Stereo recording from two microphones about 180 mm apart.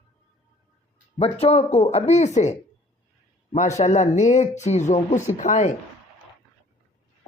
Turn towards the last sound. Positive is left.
turn(degrees=45)  # may be behind; listen again after turning